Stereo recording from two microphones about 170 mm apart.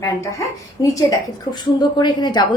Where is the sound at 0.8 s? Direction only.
20° left (ahead or behind).